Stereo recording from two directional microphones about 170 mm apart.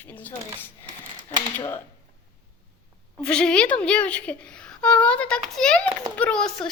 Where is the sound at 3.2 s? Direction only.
5° left (ahead or behind).